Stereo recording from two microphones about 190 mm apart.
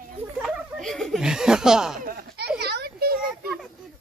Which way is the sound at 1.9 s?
50° right (ahead or behind).